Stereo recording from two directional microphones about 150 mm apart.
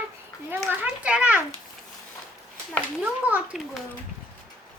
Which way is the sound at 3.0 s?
10° right (ahead or behind).